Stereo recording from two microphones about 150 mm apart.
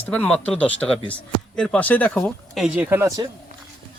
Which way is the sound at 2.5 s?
5° right (ahead or behind).